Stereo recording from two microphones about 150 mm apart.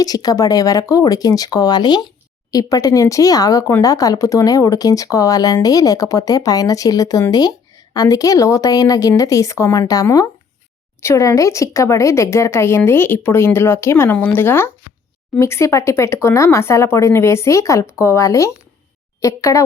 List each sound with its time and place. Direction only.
0.0 s a woman's voice: 25° left (ahead or behind)